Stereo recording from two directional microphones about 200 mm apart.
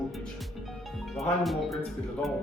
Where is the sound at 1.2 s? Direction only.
Centre (ahead or behind).